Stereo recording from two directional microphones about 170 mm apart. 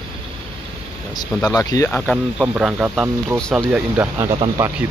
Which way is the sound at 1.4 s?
20° left (ahead or behind).